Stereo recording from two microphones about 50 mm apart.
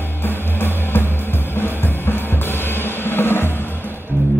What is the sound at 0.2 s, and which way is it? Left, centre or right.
Music, left.